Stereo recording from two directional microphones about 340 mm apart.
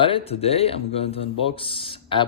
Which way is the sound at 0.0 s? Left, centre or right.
Centre.